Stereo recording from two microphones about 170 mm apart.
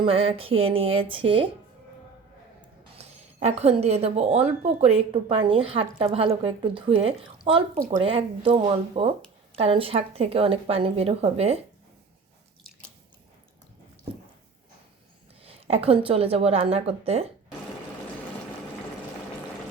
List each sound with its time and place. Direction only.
0.0 s speech: 35° right (ahead or behind)
3.0 s speech: 40° right (ahead or behind)
15.4 s speech: 35° right (ahead or behind)